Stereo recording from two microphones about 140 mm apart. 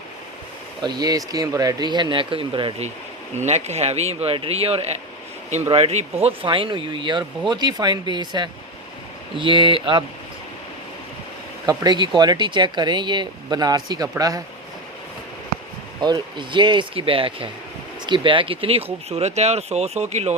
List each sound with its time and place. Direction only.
0.8 s speech: 30° right (ahead or behind)
3.3 s speech: 55° right (ahead or behind); by 10.0 s 35° right (ahead or behind)
11.6 s speech: 25° right (ahead or behind)
16.0 s speech: 30° right (ahead or behind); by 20.3 s 50° right (ahead or behind)